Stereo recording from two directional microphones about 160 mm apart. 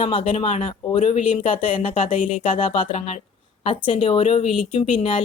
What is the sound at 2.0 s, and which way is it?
Speech, 55° left (ahead or behind).